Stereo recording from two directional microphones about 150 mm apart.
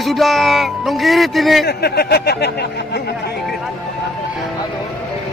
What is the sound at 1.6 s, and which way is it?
Speech, 90° left.